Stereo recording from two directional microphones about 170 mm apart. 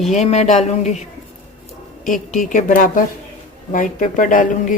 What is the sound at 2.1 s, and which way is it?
Speech, 50° left (ahead or behind).